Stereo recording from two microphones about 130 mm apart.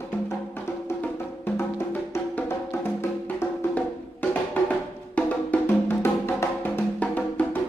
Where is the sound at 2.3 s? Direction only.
15° left (ahead or behind).